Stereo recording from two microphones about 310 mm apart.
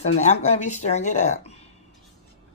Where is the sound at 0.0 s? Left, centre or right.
Left.